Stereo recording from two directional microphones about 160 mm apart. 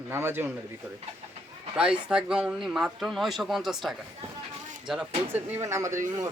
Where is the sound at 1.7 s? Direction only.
5° right (ahead or behind).